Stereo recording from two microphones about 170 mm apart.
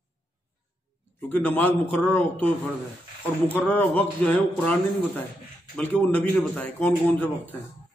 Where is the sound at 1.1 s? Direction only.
10° left (ahead or behind).